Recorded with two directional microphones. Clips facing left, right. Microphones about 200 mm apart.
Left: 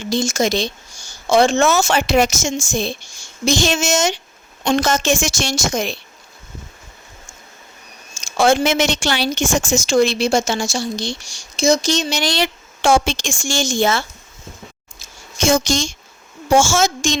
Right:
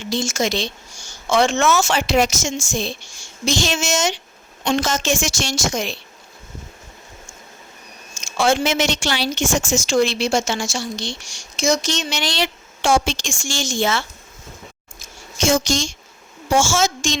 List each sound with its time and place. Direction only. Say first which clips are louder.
0.1 s a woman's voice: left 3 dB; 40° left (ahead or behind)
1.9 s a woman's voice: left 2 dB; 55° left (ahead or behind)
8.1 s a woman's voice: left 3 dB; 40° left (ahead or behind)
15.4 s a woman's voice: left 2 dB; 50° left (ahead or behind)